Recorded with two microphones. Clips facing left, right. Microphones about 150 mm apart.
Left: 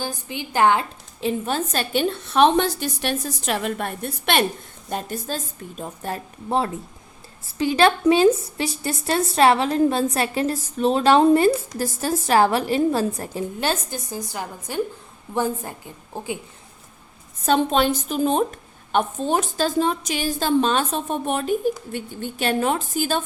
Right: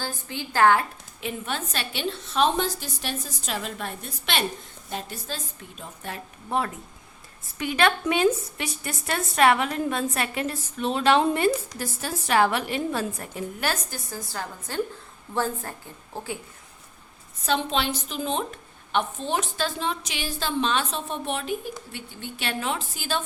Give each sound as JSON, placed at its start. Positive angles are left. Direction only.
{"t": 0.0, "sound": "a woman's voice", "side_deg": 15}
{"t": 1.2, "sound": "a woman's voice", "side_deg": 35}
{"t": 17.4, "sound": "a woman's voice", "side_deg": 45}